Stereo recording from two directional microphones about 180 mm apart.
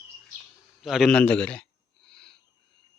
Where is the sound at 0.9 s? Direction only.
Centre (ahead or behind).